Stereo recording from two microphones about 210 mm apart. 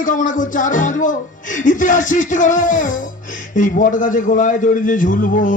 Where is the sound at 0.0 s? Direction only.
40° left (ahead or behind).